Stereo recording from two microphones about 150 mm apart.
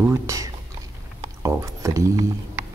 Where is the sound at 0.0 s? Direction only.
20° right (ahead or behind).